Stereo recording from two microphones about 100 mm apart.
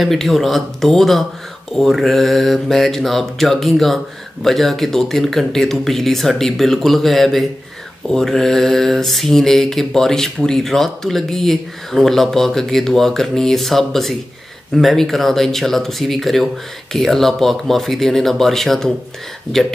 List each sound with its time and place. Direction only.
0.0 s mantra: centre (ahead or behind)